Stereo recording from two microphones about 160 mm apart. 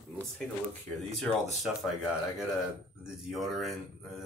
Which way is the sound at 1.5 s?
Centre (ahead or behind).